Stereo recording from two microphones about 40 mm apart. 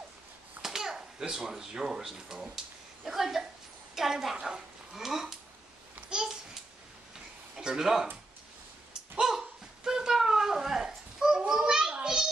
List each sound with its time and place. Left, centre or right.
0.6 s a woman's voice: centre
7.5 s speech: centre
9.1 s a sound: centre